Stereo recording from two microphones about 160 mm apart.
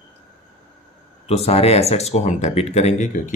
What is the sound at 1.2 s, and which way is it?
Speech, 40° left (ahead or behind).